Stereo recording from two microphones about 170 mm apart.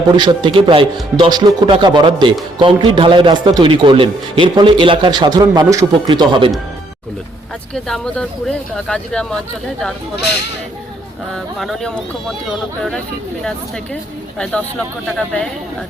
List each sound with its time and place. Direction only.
0.2 s a man's voice: 30° right (ahead or behind)
7.7 s speech: 5° left (ahead or behind)
11.3 s speech: centre (ahead or behind)
14.3 s speech: 5° left (ahead or behind)